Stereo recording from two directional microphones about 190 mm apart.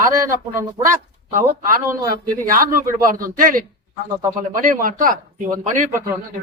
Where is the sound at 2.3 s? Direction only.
45° right (ahead or behind).